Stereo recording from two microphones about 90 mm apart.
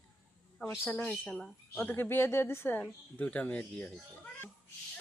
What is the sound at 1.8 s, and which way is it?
Speech, 20° left (ahead or behind).